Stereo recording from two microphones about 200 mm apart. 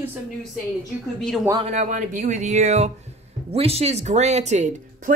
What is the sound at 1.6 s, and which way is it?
Speech, 35° right (ahead or behind).